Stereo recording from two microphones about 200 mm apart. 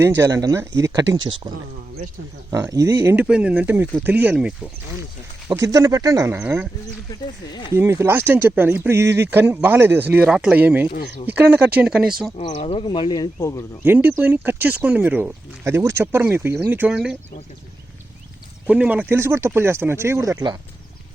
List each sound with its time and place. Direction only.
0.0 s speech: 15° right (ahead or behind)
2.5 s speech: 15° right (ahead or behind)
5.5 s speech: 15° right (ahead or behind)
7.1 s speech: 20° left (ahead or behind)
7.7 s speech: 15° right (ahead or behind)
12.4 s speech: 30° left (ahead or behind)
13.8 s speech: 10° right (ahead or behind)
18.7 s speech: 5° right (ahead or behind)